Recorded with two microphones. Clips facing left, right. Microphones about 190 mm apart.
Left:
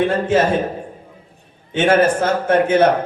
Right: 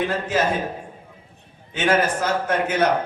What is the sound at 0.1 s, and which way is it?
Speech, 30° left (ahead or behind).